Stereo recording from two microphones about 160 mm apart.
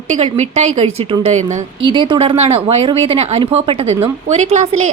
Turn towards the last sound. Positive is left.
turn(degrees=-45)  # may be behind; listen again after turning